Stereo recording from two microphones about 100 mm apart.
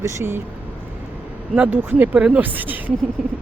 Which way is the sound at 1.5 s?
15° right (ahead or behind).